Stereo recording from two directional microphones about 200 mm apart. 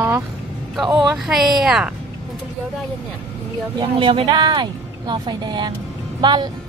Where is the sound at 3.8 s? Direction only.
25° right (ahead or behind).